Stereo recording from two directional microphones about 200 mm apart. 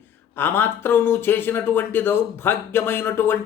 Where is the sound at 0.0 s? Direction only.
10° left (ahead or behind).